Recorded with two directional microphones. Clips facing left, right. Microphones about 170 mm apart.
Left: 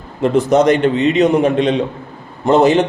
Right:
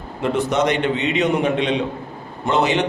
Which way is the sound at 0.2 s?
40° left (ahead or behind).